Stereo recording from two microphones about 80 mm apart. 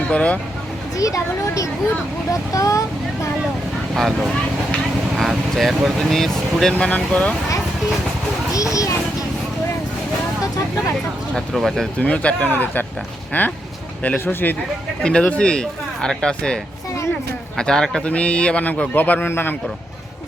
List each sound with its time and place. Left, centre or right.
0.1 s a man's voice: centre
0.9 s speech: left
3.9 s speech: centre
6.7 s a man's voice: centre
8.5 s speech: left
11.3 s speech: centre
11.9 s a man's voice: centre
17.6 s a man's voice: centre; by 19.5 s left